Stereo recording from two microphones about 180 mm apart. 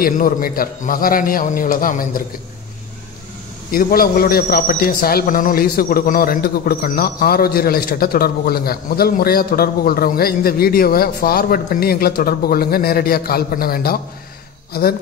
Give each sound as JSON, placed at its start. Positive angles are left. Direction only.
{"t": 0.0, "sound": "a man's voice", "side_deg": 55}
{"t": 3.7, "sound": "a man's voice", "side_deg": 55}